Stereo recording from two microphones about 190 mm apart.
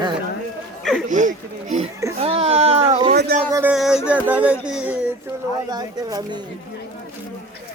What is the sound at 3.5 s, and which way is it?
Speech, 15° right (ahead or behind).